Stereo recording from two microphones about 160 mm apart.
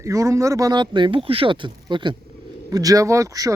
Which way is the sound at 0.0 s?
20° right (ahead or behind).